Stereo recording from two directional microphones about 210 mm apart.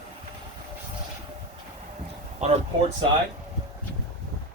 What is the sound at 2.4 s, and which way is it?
Speech, 30° right (ahead or behind).